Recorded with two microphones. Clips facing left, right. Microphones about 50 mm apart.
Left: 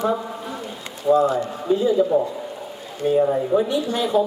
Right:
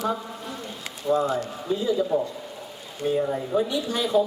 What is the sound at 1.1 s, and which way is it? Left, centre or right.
A man's voice, centre.